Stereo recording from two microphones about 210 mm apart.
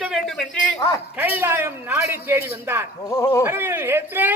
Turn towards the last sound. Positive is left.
turn(degrees=-10)  # may be behind; listen again after turning